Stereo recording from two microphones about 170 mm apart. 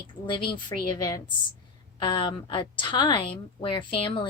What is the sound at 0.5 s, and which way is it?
A woman's voice, 25° left (ahead or behind).